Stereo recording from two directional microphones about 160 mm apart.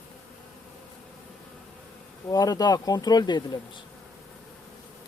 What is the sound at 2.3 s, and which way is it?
Speech, 25° left (ahead or behind).